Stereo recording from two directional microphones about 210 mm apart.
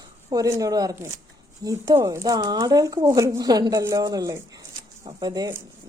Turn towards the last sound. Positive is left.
turn(degrees=-20)  # may be behind; listen again after turning